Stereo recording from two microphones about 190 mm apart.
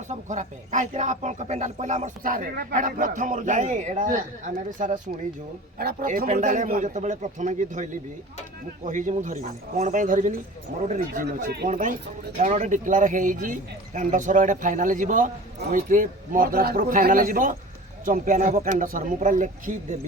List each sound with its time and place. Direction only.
0.1 s speech: 40° right (ahead or behind)